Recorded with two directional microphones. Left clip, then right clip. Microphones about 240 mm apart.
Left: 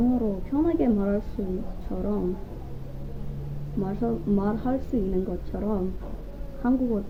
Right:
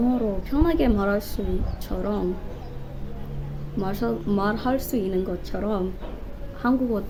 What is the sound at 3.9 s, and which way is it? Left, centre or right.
Speech, centre.